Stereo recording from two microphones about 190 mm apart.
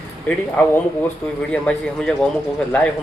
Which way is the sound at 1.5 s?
5° left (ahead or behind).